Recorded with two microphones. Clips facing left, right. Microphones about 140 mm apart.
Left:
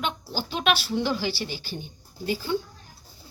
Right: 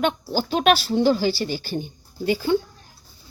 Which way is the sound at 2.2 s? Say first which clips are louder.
Right 7 dB; 70° right (ahead or behind).